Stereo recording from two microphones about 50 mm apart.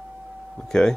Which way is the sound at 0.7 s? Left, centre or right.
Centre.